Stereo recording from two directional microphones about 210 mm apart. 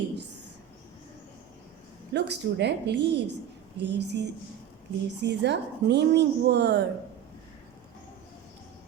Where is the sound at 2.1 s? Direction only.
55° right (ahead or behind).